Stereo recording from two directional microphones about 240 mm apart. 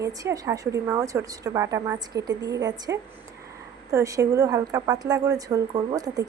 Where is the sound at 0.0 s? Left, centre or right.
Centre.